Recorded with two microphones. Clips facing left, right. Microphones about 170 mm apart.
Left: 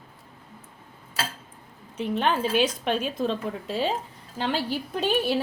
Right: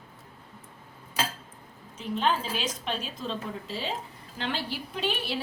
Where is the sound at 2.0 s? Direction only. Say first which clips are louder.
Left 3 dB; 60° left (ahead or behind).